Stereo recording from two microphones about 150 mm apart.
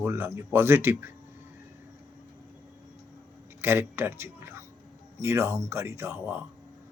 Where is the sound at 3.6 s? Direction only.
15° right (ahead or behind).